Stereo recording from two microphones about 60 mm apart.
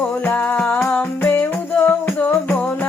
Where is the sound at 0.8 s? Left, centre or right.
Left.